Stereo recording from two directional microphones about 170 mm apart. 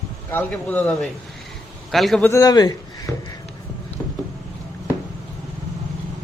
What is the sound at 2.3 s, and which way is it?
Speech, 20° left (ahead or behind).